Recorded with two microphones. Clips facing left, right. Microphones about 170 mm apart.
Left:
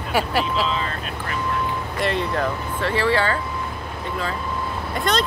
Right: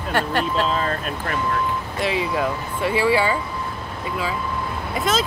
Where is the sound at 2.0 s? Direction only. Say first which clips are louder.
Even; 5° right (ahead or behind).